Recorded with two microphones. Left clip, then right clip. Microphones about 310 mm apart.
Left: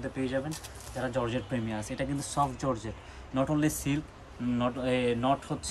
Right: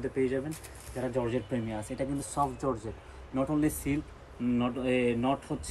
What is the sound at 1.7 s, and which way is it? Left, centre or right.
Speech, left.